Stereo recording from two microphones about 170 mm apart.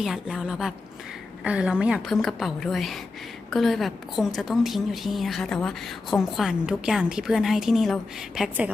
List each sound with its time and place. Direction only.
0.0 s a woman's voice: centre (ahead or behind)